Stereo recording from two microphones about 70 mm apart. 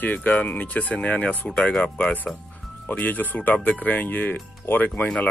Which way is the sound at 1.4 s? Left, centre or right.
Centre.